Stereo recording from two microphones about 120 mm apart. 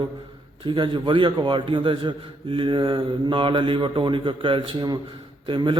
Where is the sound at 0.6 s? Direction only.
45° right (ahead or behind).